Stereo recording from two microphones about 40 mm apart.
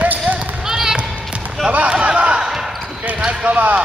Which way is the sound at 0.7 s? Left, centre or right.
Centre.